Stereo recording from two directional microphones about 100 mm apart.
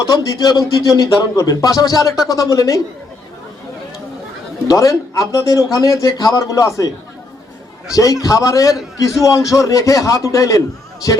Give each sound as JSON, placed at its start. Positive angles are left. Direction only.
{"t": 0.0, "sound": "speech", "side_deg": 40}
{"t": 4.7, "sound": "speech", "side_deg": 35}
{"t": 7.9, "sound": "speech", "side_deg": 35}